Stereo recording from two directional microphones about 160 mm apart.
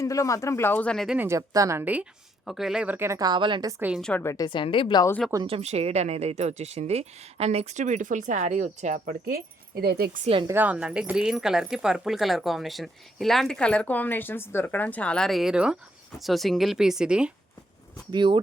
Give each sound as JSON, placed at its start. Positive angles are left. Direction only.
{"t": 0.0, "sound": "speech", "side_deg": 20}
{"t": 1.3, "sound": "a woman's voice", "side_deg": -20}
{"t": 3.8, "sound": "a woman's voice", "side_deg": -10}
{"t": 4.2, "sound": "speech", "side_deg": 20}
{"t": 4.4, "sound": "a woman's voice", "side_deg": 30}
{"t": 5.5, "sound": "speech", "side_deg": -40}
{"t": 9.8, "sound": "speech", "side_deg": -80}
{"t": 10.4, "sound": "speech", "side_deg": -10}
{"t": 18.1, "sound": "speech", "side_deg": -30}